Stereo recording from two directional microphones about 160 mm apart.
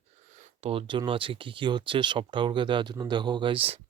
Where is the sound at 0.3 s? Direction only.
35° right (ahead or behind).